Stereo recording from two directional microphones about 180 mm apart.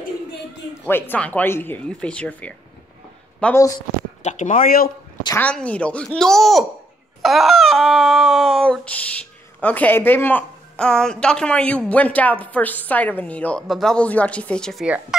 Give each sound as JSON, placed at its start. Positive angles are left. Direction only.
{"t": 0.8, "sound": "a woman's voice", "side_deg": 10}
{"t": 4.2, "sound": "speech", "side_deg": 45}
{"t": 5.4, "sound": "a sound", "side_deg": 5}
{"t": 9.6, "sound": "a woman's voice", "side_deg": 10}